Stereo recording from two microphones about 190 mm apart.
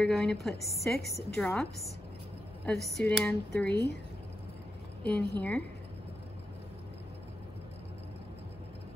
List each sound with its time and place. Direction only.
0.0 s speech: 5° left (ahead or behind)
3.6 s speech: 60° left (ahead or behind)
5.0 s a woman's voice: 10° left (ahead or behind)